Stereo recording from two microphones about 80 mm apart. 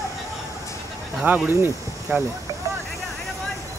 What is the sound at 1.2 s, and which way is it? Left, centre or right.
Speech, right.